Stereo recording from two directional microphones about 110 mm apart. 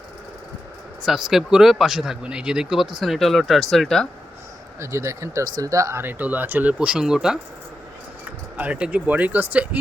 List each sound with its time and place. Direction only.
1.0 s speech: 5° right (ahead or behind)
4.8 s speech: 25° right (ahead or behind)
6.0 s speech: 15° right (ahead or behind)
8.5 s speech: 15° right (ahead or behind)